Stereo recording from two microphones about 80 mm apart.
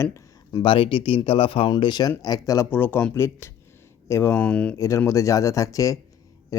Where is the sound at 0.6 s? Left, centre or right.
Left.